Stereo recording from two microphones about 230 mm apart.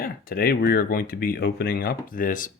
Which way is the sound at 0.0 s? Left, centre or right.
Left.